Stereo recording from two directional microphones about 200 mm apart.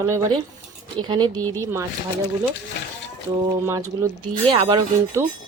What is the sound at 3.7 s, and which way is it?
Speech, 15° right (ahead or behind).